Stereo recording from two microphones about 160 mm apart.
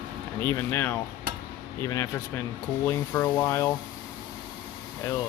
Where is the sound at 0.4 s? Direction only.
15° left (ahead or behind).